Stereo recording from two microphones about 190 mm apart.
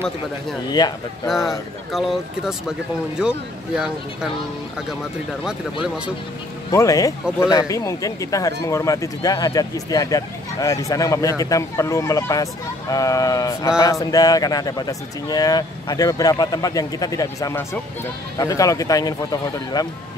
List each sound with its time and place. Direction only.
0.7 s speech: 20° left (ahead or behind)
1.2 s speech: centre (ahead or behind)
5.4 s speech: 5° right (ahead or behind)
6.7 s speech: 15° left (ahead or behind)